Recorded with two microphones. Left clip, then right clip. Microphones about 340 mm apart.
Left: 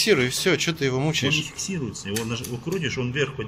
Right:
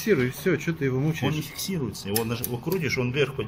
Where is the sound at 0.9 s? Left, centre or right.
Left.